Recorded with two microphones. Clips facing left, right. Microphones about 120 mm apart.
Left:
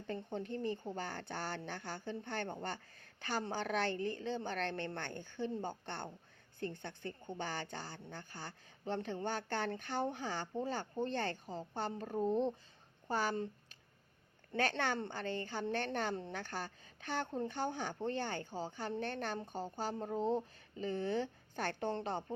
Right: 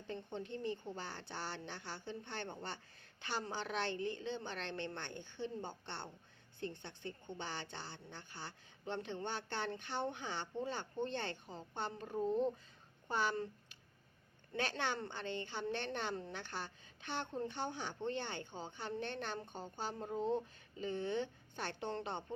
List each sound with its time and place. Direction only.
0.1 s a woman's voice: 45° left (ahead or behind)
14.5 s a woman's voice: 50° left (ahead or behind)